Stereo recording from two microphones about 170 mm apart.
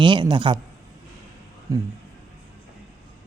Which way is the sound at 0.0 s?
25° right (ahead or behind).